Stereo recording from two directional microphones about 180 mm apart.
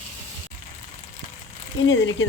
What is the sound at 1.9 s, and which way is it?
Speech, 90° left.